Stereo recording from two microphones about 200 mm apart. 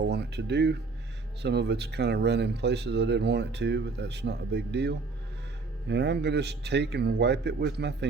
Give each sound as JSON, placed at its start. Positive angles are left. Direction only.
{"t": 0.0, "sound": "speech", "side_deg": -55}